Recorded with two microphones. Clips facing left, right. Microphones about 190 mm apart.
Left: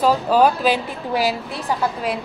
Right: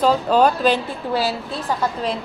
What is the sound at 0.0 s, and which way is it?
A woman's voice, 5° left (ahead or behind).